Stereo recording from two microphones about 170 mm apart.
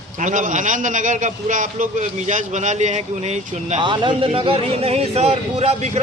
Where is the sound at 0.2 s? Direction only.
50° right (ahead or behind).